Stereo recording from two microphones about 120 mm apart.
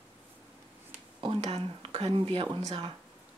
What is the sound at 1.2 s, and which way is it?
Speech, 55° right (ahead or behind).